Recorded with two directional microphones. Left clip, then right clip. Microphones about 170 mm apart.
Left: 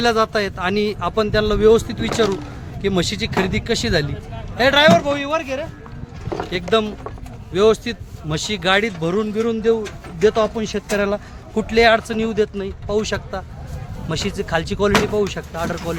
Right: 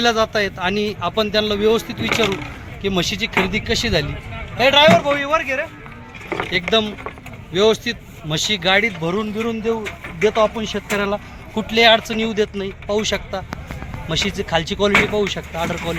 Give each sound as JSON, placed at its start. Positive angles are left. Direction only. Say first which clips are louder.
{"t": 0.0, "sound": "speech", "louder": "even", "side_deg": 10}
{"t": 6.3, "sound": "speech", "louder": "right 1 dB", "side_deg": 5}
{"t": 9.0, "sound": "speech", "louder": "left 2 dB", "side_deg": 25}
{"t": 11.5, "sound": "speech", "louder": "right 1 dB", "side_deg": 15}